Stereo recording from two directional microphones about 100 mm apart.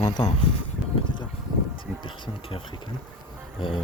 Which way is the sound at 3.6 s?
60° left (ahead or behind).